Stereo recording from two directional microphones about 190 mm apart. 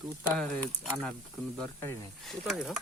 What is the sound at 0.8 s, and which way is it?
Speech, centre (ahead or behind).